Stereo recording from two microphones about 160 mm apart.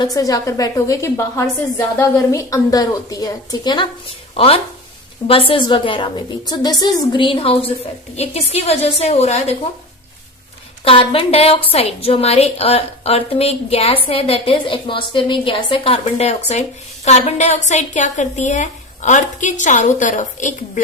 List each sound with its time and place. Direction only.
0.0 s a woman's voice: 20° left (ahead or behind); by 9.6 s 40° left (ahead or behind)
10.8 s a woman's voice: 35° left (ahead or behind)